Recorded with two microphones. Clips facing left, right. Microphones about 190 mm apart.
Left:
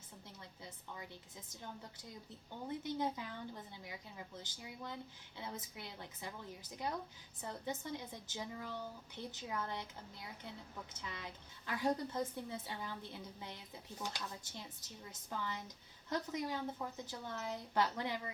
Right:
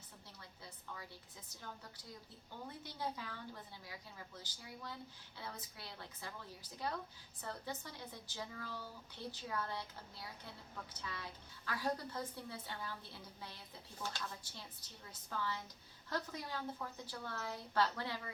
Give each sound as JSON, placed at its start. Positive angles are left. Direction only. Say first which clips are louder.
{"t": 2.6, "sound": "a woman's voice", "louder": "left 6 dB", "side_deg": 20}